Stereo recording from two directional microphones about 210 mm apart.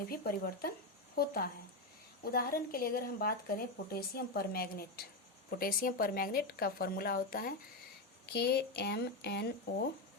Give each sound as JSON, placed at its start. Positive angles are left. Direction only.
{"t": 0.1, "sound": "speech", "side_deg": 45}